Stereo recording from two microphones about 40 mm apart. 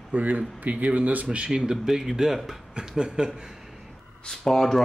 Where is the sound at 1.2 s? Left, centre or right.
Right.